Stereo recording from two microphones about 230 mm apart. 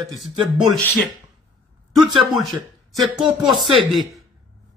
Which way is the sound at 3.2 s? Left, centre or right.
Centre.